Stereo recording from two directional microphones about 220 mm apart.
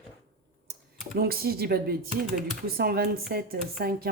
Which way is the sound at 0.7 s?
45° right (ahead or behind).